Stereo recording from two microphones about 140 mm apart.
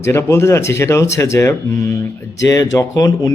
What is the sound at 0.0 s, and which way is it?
Speech, 20° left (ahead or behind).